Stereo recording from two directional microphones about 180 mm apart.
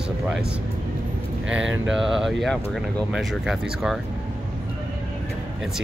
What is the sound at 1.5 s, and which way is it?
Speech, 5° right (ahead or behind).